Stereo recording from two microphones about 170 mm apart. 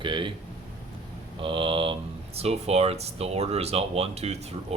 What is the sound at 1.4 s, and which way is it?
Speech, 30° right (ahead or behind).